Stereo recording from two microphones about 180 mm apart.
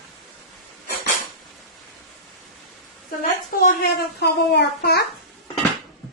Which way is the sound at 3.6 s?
60° left (ahead or behind).